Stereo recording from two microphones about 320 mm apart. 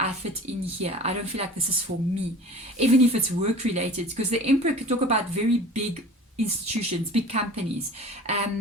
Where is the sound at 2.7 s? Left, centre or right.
Centre.